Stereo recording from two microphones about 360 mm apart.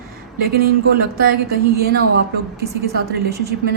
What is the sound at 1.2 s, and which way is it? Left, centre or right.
A woman's voice, right.